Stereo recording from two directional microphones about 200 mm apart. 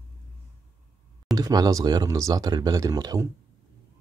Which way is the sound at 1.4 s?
20° right (ahead or behind).